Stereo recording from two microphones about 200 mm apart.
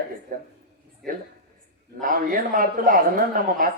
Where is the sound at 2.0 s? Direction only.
45° right (ahead or behind).